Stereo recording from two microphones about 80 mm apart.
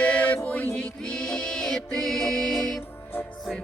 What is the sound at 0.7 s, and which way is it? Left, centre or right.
Music, centre.